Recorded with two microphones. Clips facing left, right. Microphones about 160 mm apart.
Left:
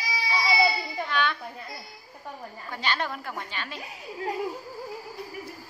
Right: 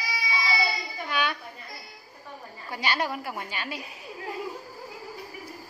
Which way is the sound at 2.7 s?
10° right (ahead or behind).